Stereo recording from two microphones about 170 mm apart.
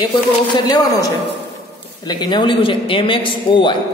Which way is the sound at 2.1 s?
25° left (ahead or behind).